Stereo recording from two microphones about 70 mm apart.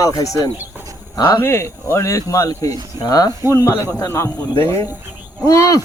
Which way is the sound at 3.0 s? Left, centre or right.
Left.